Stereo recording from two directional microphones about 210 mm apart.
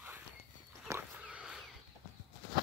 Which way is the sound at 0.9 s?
5° right (ahead or behind).